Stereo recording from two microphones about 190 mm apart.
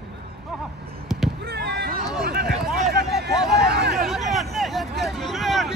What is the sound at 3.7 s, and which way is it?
Hubbub, 60° right (ahead or behind).